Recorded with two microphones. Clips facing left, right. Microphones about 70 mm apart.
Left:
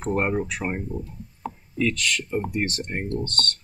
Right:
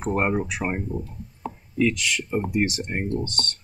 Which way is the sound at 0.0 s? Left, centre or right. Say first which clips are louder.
Right 1 dB; centre.